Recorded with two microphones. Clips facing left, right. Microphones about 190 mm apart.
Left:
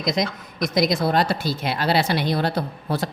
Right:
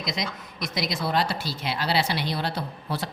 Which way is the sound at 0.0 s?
45° left (ahead or behind).